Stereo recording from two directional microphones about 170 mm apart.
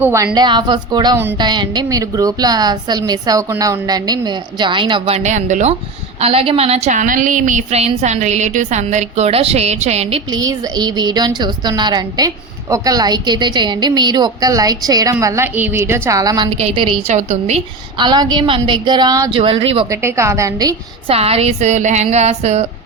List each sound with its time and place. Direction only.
0.0 s a woman's voice: 15° right (ahead or behind)
0.3 s a woman's voice: 25° right (ahead or behind)
10.3 s a woman's voice: 25° right (ahead or behind)
16.5 s a woman's voice: 35° right (ahead or behind)
17.9 s a woman's voice: 25° right (ahead or behind)
19.9 s a woman's voice: 15° right (ahead or behind)
21.1 s a woman's voice: 35° right (ahead or behind)